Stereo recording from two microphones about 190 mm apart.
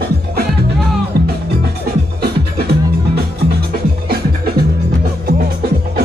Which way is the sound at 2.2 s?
60° right (ahead or behind).